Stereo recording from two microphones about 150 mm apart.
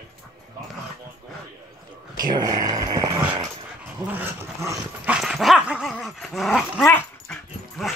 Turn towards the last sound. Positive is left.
turn(degrees=5)  # may be behind; listen again after turning